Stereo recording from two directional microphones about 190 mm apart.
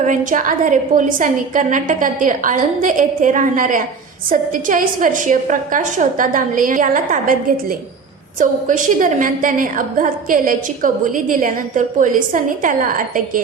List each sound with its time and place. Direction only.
0.0 s a woman's voice: 40° right (ahead or behind)